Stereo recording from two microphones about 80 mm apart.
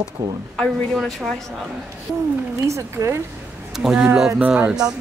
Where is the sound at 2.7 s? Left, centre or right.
Right.